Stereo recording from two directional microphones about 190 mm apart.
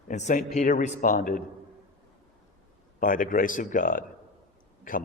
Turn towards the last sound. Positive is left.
turn(degrees=45)  # may be behind; listen again after turning